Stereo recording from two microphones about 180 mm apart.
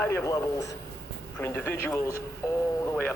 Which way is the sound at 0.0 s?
15° left (ahead or behind).